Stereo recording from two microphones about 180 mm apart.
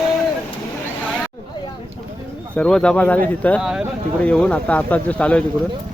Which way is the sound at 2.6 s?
5° left (ahead or behind).